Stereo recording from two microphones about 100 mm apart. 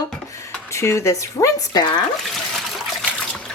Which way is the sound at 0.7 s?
30° left (ahead or behind).